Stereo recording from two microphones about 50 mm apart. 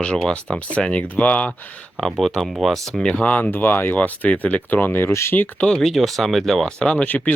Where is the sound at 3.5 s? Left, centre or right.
Left.